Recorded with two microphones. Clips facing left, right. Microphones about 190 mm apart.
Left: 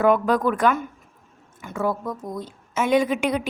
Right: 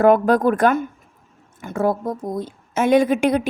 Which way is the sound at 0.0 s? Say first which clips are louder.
Right 4 dB; 45° right (ahead or behind).